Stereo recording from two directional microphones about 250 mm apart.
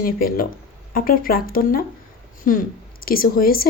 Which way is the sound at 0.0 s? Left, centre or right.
Left.